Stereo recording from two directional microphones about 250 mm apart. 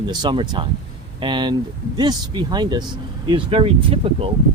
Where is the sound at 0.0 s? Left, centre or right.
Centre.